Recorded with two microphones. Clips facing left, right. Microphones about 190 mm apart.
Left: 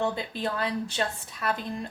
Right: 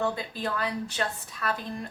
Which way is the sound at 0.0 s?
25° left (ahead or behind).